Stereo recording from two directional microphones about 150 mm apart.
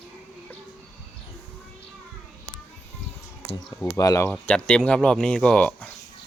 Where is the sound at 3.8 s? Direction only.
20° left (ahead or behind).